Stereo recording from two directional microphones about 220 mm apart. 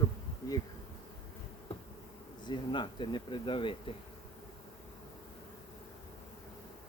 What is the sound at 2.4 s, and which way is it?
Speech, 20° left (ahead or behind).